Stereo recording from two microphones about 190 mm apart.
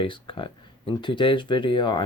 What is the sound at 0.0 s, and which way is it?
Speech, 25° left (ahead or behind).